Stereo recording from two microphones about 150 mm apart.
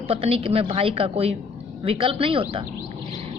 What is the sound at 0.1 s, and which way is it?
A woman's voice, 40° right (ahead or behind).